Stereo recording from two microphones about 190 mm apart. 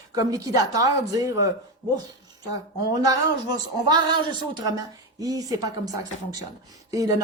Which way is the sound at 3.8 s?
20° right (ahead or behind).